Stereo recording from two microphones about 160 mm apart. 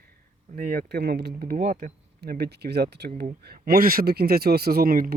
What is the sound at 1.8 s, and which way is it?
Speech, 65° right (ahead or behind).